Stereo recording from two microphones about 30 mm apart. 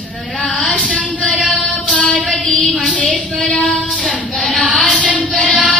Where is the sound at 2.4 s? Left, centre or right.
Left.